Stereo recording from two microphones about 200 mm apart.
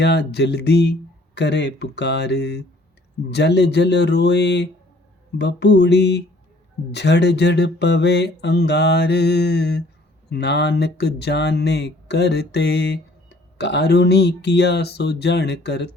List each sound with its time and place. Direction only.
0.0 s mantra: 55° left (ahead or behind)